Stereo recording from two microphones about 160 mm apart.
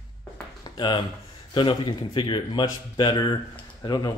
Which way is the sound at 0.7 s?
30° left (ahead or behind).